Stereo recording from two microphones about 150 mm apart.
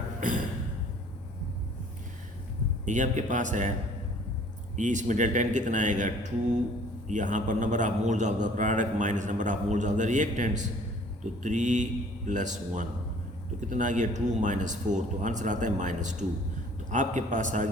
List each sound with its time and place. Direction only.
0.2 s a sound: 60° right (ahead or behind)
2.8 s a man's voice: 55° right (ahead or behind)
4.8 s a man's voice: 55° right (ahead or behind)